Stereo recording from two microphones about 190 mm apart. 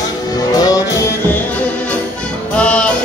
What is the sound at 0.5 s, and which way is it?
Music, 20° left (ahead or behind).